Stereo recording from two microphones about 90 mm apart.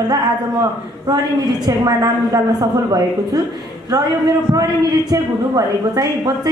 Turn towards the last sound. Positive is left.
turn(degrees=-40)  # may be behind; listen again after turning